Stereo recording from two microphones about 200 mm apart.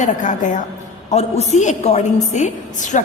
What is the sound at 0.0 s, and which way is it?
A woman's voice, 40° left (ahead or behind).